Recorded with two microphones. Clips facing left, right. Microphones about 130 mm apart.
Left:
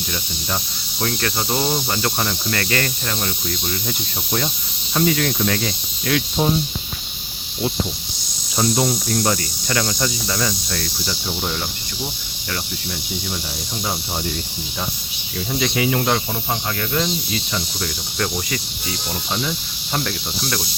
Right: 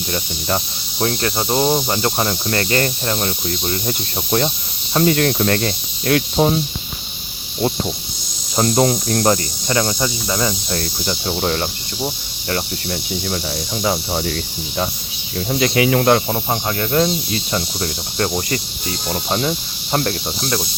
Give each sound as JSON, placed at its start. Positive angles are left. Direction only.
{"t": 0.9, "sound": "cricket", "side_deg": -25}
{"t": 4.9, "sound": "speech", "side_deg": -45}
{"t": 8.6, "sound": "speech", "side_deg": -55}
{"t": 9.6, "sound": "cricket", "side_deg": -25}
{"t": 11.3, "sound": "speech", "side_deg": -60}
{"t": 12.0, "sound": "insect", "side_deg": -35}
{"t": 15.6, "sound": "speech", "side_deg": -70}
{"t": 16.0, "sound": "speech", "side_deg": -55}
{"t": 16.5, "sound": "cricket", "side_deg": -35}